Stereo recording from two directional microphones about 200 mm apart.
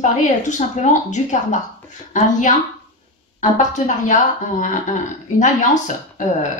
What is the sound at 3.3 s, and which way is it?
Speech, 40° left (ahead or behind).